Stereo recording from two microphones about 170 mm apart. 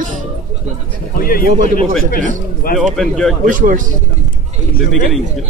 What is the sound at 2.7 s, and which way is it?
Speech, centre (ahead or behind).